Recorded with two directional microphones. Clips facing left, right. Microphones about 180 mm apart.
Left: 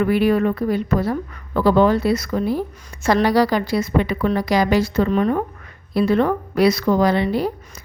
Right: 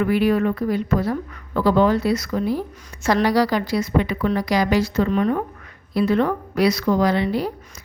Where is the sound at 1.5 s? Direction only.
60° left (ahead or behind).